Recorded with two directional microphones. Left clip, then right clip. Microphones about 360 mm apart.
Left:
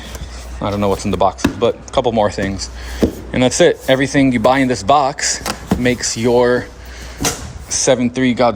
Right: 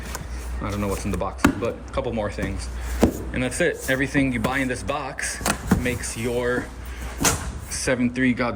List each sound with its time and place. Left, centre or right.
0.6 s speech: centre
7.9 s speech: centre